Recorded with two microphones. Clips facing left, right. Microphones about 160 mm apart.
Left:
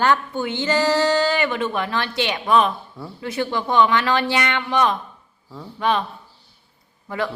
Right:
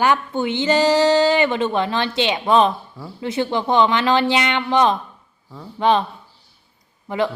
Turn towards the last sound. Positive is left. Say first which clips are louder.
# right 4 dB
turn(degrees=-20)  # may be behind; listen again after turning